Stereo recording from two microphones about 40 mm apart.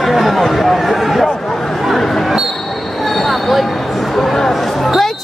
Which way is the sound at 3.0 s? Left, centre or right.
Centre.